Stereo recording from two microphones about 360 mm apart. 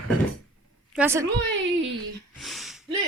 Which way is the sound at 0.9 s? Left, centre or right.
Centre.